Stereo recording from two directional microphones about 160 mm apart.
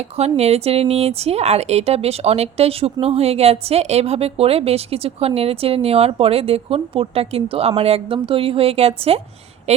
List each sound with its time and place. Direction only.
0.2 s speech: 40° right (ahead or behind)